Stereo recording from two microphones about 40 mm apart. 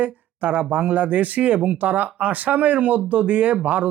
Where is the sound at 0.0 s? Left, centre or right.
Right.